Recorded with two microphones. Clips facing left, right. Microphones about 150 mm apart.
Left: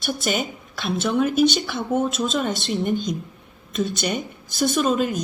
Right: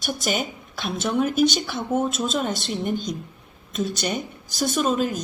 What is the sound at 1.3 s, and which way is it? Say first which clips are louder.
Speech: left 2 dB; 45° right (ahead or behind).